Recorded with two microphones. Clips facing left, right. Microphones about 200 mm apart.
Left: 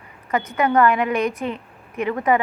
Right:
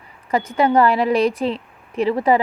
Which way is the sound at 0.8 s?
35° right (ahead or behind).